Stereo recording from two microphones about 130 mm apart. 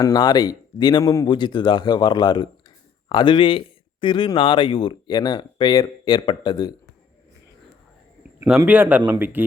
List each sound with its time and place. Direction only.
0.0 s speech: 30° left (ahead or behind)
8.4 s speech: 10° right (ahead or behind)